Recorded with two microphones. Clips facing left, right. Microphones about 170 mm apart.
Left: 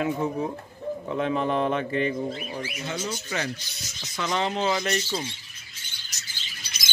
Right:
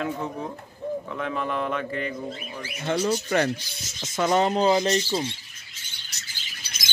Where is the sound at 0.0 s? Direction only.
10° left (ahead or behind).